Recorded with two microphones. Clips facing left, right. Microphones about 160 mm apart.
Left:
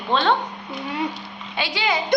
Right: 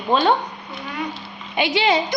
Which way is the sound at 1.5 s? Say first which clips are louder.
Right 6 dB; 20° right (ahead or behind).